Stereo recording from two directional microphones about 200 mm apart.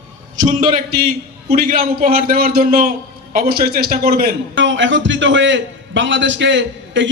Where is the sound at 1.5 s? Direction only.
50° right (ahead or behind).